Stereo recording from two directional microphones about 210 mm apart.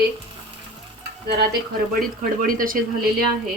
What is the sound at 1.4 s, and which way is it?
Speech, 45° right (ahead or behind).